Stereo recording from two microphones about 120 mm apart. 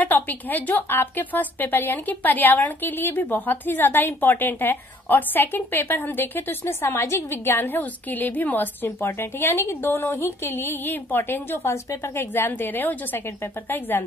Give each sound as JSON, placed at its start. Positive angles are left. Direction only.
{"t": 0.0, "sound": "a woman's voice", "side_deg": 15}